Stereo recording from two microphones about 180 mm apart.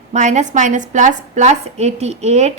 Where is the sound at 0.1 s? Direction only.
40° right (ahead or behind).